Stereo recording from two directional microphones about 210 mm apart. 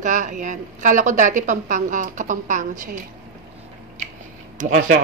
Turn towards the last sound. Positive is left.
turn(degrees=-40)  # may be behind; listen again after turning